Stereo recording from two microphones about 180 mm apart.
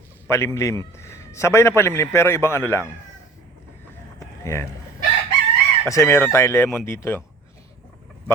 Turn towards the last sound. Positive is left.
turn(degrees=15)  # may be behind; listen again after turning